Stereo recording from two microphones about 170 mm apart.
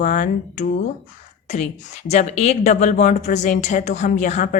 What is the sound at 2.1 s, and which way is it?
A woman's voice, 40° left (ahead or behind).